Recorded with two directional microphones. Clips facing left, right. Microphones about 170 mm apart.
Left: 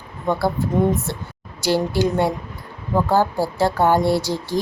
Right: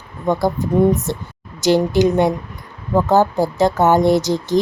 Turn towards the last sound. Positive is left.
turn(degrees=-20)  # may be behind; listen again after turning